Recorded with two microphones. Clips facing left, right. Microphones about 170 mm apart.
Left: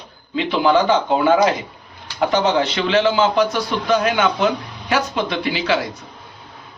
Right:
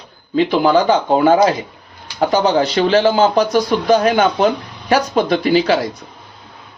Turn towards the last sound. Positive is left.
turn(degrees=-40)  # may be behind; listen again after turning